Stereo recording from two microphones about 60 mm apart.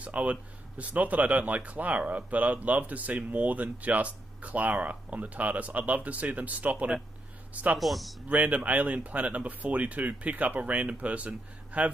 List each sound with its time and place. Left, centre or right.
0.0 s speech: right
7.8 s speech: centre
8.3 s speech: right